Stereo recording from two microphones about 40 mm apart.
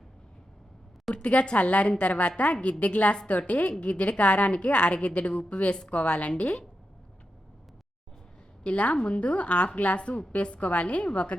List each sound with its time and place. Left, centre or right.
1.1 s a woman's voice: left
8.6 s speech: left